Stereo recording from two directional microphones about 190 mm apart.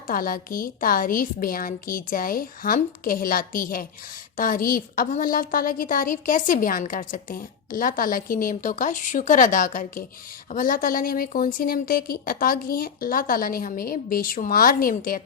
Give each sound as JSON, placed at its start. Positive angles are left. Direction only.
{"t": 0.1, "sound": "a woman's voice", "side_deg": 50}